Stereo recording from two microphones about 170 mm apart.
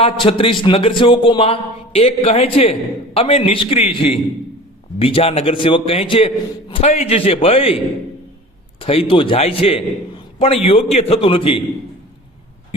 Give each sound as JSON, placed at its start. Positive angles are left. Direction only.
{"t": 0.3, "sound": "a man's voice", "side_deg": 30}
{"t": 8.8, "sound": "a man's voice", "side_deg": 35}